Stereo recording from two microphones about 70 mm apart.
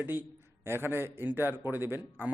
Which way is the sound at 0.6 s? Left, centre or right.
Right.